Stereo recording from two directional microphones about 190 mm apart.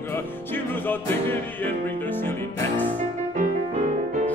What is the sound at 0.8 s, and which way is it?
Music, 10° left (ahead or behind).